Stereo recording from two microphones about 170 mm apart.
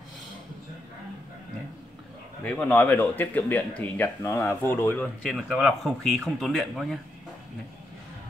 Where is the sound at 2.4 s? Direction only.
10° left (ahead or behind).